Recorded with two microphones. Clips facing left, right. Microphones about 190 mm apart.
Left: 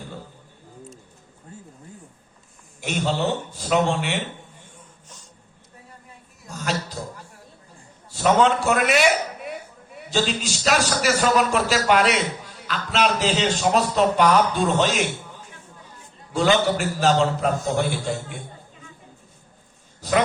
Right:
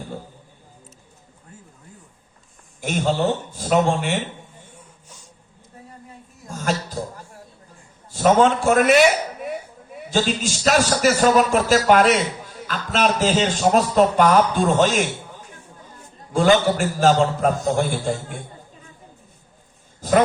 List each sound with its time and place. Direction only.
2.8 s a man's voice: 45° right (ahead or behind)
4.7 s a sound: 10° right (ahead or behind)
6.5 s a sound: 50° right (ahead or behind)
8.1 s a man's voice: 45° right (ahead or behind)
10.1 s a man's voice: 50° right (ahead or behind)
16.3 s a man's voice: 50° right (ahead or behind)
20.0 s a man's voice: 45° right (ahead or behind)